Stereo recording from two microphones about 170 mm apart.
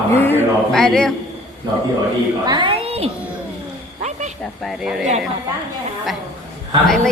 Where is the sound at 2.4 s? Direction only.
30° right (ahead or behind).